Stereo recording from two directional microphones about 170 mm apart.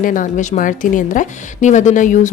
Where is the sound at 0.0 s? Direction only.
50° left (ahead or behind).